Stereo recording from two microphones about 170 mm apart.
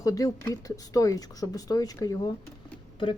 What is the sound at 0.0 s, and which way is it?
Speech, 20° left (ahead or behind).